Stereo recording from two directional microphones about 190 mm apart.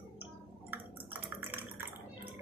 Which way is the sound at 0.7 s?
10° right (ahead or behind).